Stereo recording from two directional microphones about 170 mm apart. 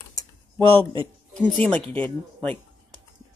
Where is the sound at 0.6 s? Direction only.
30° right (ahead or behind).